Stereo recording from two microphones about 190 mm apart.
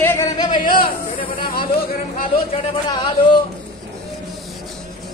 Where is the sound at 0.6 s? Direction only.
50° left (ahead or behind).